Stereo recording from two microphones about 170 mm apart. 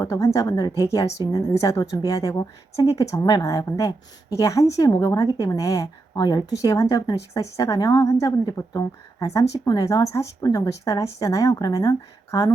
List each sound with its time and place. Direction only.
0.0 s speech: 20° left (ahead or behind)